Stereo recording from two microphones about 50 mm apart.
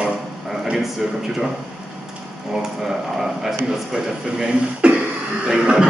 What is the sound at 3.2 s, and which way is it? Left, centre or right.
Speech, centre.